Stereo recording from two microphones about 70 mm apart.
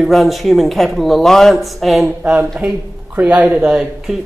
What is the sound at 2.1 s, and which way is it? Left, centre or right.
Speech, centre.